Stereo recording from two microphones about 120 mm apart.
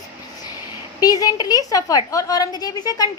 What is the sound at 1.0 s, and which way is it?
A woman's voice, 30° left (ahead or behind).